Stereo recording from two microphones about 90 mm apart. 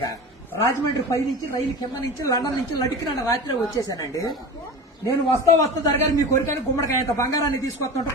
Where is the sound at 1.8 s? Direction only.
40° left (ahead or behind).